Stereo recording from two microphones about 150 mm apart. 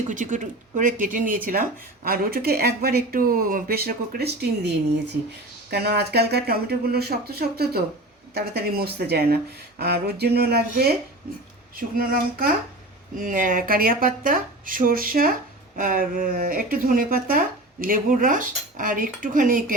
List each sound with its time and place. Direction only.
0.1 s speech: 55° right (ahead or behind)
2.0 s speech: 85° right
5.7 s speech: 90° right
11.8 s speech: 75° right (ahead or behind)